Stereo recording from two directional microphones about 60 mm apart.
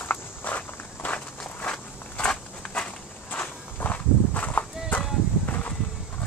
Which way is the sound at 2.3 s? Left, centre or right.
Centre.